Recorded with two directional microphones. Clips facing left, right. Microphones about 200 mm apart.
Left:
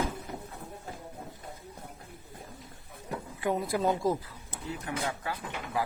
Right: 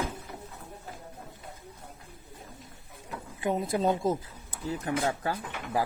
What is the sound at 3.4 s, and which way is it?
Speech, 20° right (ahead or behind).